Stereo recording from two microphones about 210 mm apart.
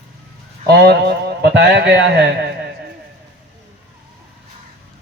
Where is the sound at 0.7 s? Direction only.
50° right (ahead or behind).